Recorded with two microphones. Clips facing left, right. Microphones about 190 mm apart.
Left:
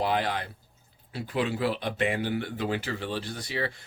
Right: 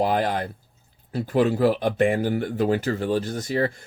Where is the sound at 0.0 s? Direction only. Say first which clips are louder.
Right 5 dB; 45° right (ahead or behind).